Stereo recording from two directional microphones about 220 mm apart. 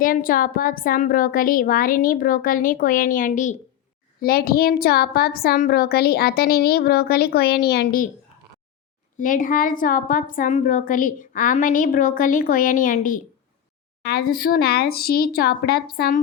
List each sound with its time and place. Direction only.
0.0 s a woman's voice: 40° left (ahead or behind)
9.2 s a woman's voice: 40° left (ahead or behind)